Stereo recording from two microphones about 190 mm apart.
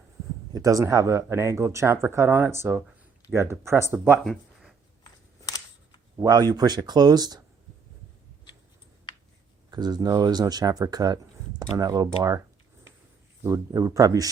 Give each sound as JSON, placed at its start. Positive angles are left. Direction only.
{"t": 0.5, "sound": "speech", "side_deg": -15}
{"t": 6.1, "sound": "speech", "side_deg": -20}
{"t": 9.6, "sound": "speech", "side_deg": -20}
{"t": 13.4, "sound": "speech", "side_deg": -15}